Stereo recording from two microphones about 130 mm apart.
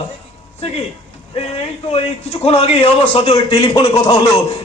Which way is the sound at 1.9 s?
50° left (ahead or behind).